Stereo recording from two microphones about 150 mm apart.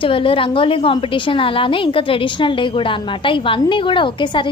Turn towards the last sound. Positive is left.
turn(degrees=35)  # may be behind; listen again after turning